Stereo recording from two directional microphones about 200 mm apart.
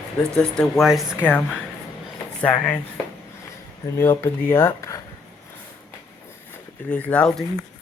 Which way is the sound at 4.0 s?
10° left (ahead or behind).